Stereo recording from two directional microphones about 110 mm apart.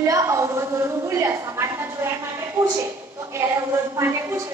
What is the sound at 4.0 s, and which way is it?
Speech, 25° right (ahead or behind).